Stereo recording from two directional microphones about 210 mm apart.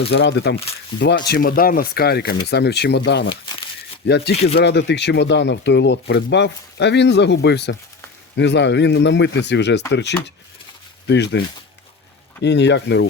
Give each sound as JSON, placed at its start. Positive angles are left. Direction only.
{"t": 0.1, "sound": "speech", "side_deg": 55}
{"t": 1.3, "sound": "speech", "side_deg": 45}